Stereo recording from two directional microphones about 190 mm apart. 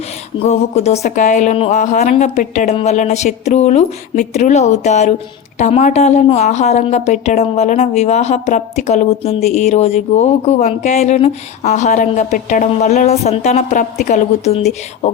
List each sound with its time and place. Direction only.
0.3 s a woman's voice: 35° left (ahead or behind)